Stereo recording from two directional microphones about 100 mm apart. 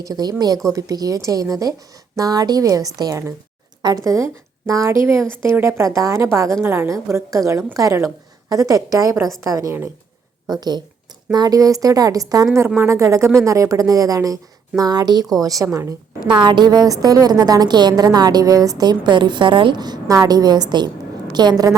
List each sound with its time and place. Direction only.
0.0 s a woman's voice: 40° right (ahead or behind)
12.5 s speech: 25° right (ahead or behind)
16.2 s a woman's voice: 50° right (ahead or behind)